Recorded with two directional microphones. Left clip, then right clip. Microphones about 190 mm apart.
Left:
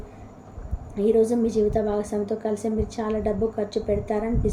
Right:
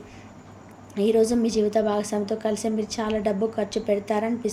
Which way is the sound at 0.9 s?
20° right (ahead or behind).